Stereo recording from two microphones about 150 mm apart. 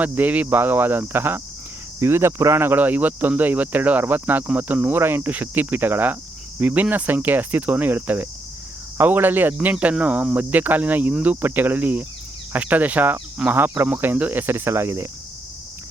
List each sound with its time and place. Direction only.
0.0 s speech: 10° right (ahead or behind)